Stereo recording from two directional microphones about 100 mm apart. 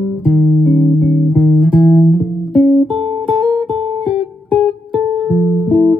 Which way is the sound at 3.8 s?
50° right (ahead or behind).